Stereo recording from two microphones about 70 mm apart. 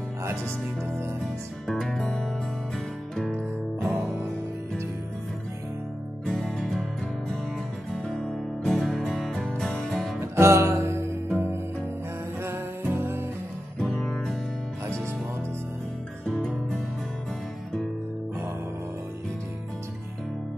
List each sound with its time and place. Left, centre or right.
1.2 s music: centre
3.9 s music: right
6.4 s music: centre
7.9 s music: centre
10.2 s music: right
13.7 s music: centre
16.3 s music: centre